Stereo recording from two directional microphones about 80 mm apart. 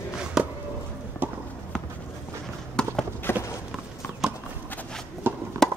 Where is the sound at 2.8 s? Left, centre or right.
Centre.